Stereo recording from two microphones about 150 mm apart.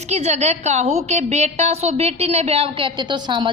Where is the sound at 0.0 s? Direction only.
45° right (ahead or behind).